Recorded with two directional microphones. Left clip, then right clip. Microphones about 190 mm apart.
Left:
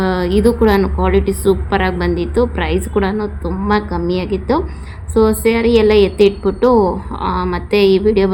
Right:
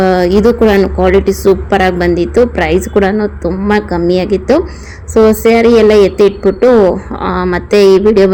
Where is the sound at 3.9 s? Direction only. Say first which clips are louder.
Right 7 dB; 15° right (ahead or behind).